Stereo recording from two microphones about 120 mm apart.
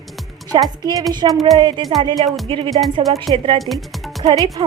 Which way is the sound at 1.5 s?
40° right (ahead or behind).